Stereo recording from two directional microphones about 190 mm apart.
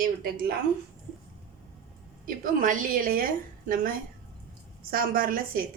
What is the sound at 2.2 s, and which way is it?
A woman's voice, 45° right (ahead or behind).